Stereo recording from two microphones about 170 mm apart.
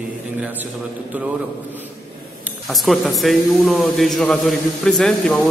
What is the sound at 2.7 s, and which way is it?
A man's voice, centre (ahead or behind).